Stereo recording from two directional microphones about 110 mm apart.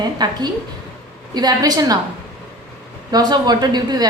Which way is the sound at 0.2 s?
40° right (ahead or behind).